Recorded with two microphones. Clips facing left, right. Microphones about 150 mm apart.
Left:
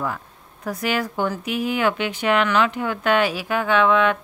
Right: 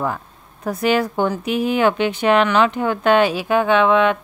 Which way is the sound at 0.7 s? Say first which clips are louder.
Right 6 dB; 25° right (ahead or behind).